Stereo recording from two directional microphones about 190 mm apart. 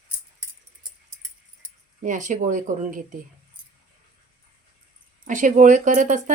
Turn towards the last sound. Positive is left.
turn(degrees=-40)  # may be behind; listen again after turning